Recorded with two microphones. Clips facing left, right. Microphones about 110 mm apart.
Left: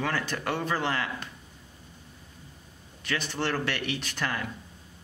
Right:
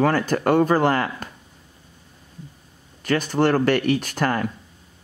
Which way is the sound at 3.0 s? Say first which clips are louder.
Right 11 dB; 45° right (ahead or behind).